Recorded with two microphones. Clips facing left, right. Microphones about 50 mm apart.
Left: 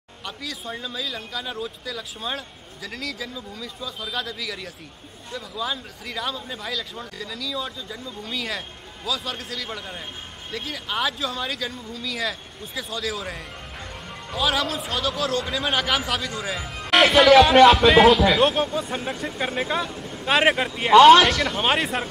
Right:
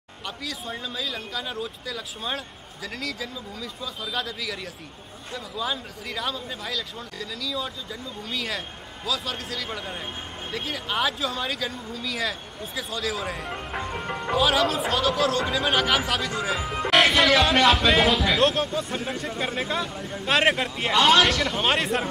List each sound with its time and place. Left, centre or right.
0.2 s speech: centre
13.7 s music: right
14.3 s speech: centre